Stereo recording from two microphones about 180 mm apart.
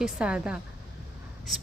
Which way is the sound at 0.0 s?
5° right (ahead or behind).